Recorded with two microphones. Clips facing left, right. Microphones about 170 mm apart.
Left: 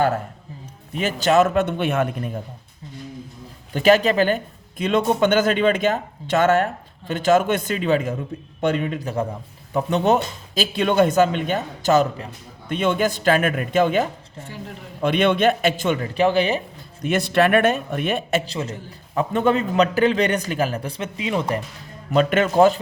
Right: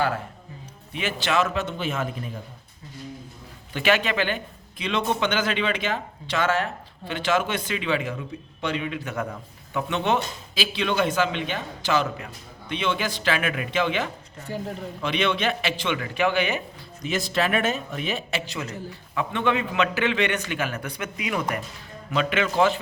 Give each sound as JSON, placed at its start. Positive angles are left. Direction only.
{"t": 0.9, "sound": "speech", "side_deg": 40}
{"t": 3.7, "sound": "speech", "side_deg": 40}
{"t": 17.0, "sound": "speech", "side_deg": 60}
{"t": 18.4, "sound": "a man's voice", "side_deg": 30}
{"t": 22.1, "sound": "speech", "side_deg": 45}